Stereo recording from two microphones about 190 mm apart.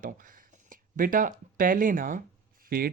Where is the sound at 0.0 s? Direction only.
45° right (ahead or behind).